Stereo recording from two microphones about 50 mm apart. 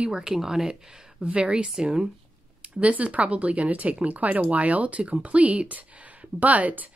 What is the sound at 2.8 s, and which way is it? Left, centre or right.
A woman's voice, right.